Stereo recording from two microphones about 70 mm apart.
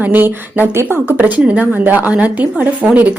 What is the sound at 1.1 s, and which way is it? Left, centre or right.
Speech, right.